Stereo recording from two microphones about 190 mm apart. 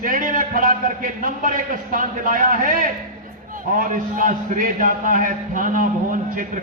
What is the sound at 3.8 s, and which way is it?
A man's voice, 45° right (ahead or behind).